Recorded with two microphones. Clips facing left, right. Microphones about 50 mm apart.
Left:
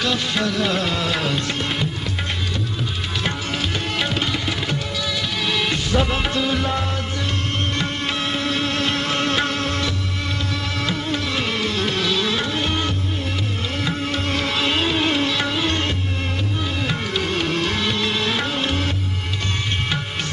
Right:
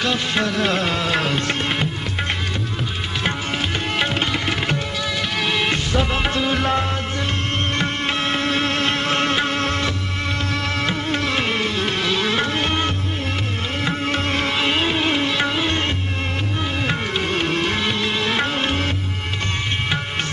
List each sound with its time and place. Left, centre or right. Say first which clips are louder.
0.0 s music: right 1 dB; right
1.1 s music: right 2 dB; centre
4.0 s music: right 2 dB; right
11.4 s music: right 1 dB; right
18.3 s music: right 2 dB; right